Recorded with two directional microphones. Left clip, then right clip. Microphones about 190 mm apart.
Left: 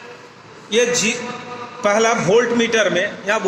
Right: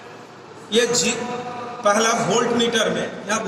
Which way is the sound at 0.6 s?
45° left (ahead or behind).